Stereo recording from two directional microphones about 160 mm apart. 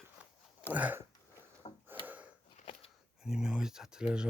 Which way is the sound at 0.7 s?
10° right (ahead or behind).